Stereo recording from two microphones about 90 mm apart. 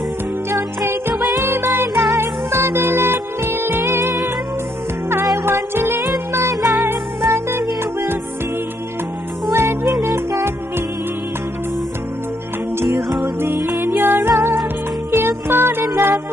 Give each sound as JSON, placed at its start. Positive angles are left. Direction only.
{"t": 0.5, "sound": "music", "side_deg": -25}
{"t": 5.4, "sound": "music", "side_deg": -25}
{"t": 9.5, "sound": "music", "side_deg": -30}
{"t": 13.4, "sound": "music", "side_deg": -25}